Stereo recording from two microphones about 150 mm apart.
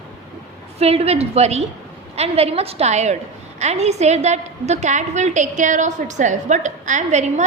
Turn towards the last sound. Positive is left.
turn(degrees=-50)  # may be behind; listen again after turning